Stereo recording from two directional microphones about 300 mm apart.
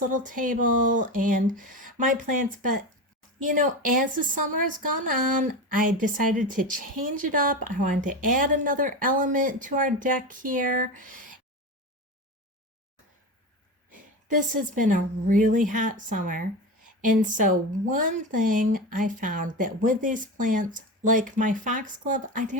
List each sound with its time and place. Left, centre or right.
0.2 s a woman's voice: right
4.4 s a woman's voice: right
4.9 s a woman's voice: right
13.9 s a woman's voice: right